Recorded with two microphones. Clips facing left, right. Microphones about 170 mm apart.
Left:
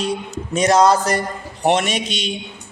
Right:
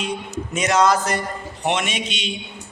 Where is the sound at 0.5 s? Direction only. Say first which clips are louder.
Left 4 dB; 35° left (ahead or behind).